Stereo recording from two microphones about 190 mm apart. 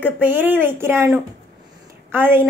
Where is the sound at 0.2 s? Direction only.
10° right (ahead or behind).